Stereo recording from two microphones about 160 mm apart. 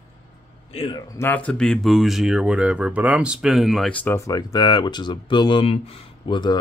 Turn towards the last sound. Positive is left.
turn(degrees=30)  # may be behind; listen again after turning